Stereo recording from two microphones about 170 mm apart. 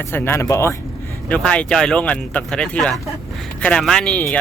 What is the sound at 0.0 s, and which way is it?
Speech, 15° left (ahead or behind).